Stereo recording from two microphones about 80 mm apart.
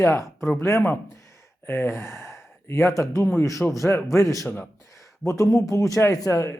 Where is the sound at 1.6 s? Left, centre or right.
Left.